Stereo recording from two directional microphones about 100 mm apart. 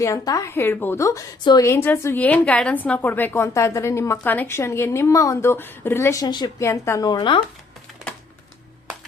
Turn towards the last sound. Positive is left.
turn(degrees=50)  # may be behind; listen again after turning